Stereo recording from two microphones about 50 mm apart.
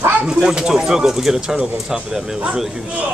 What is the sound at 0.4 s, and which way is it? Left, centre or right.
Speech, centre.